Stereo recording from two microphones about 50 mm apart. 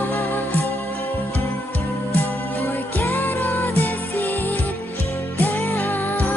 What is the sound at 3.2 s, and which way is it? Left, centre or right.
Music, left.